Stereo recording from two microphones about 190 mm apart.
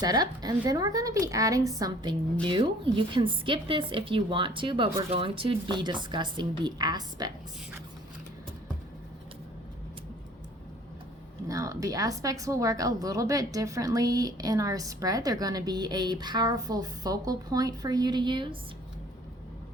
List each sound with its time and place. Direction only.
0.0 s speech: 20° right (ahead or behind)
11.4 s speech: 15° right (ahead or behind)